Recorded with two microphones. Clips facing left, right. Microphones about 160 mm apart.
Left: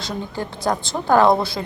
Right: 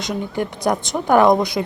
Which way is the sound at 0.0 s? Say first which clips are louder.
Right 4 dB; 20° right (ahead or behind).